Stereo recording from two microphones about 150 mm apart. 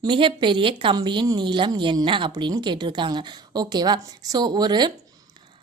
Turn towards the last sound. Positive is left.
turn(degrees=-30)  # may be behind; listen again after turning